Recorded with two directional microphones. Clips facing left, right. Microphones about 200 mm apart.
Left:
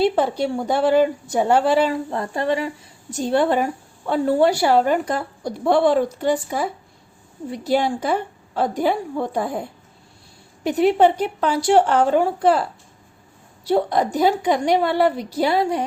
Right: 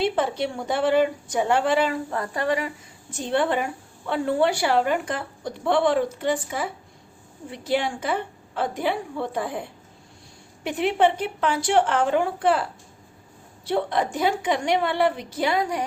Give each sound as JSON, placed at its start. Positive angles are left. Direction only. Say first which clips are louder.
{"t": 0.0, "sound": "a woman's voice", "louder": "left 5 dB", "side_deg": 35}
{"t": 2.0, "sound": "speech", "louder": "left 3 dB", "side_deg": 25}
{"t": 3.1, "sound": "a woman's voice", "louder": "left 5 dB", "side_deg": 40}
{"t": 13.7, "sound": "a woman's voice", "louder": "left 5 dB", "side_deg": 40}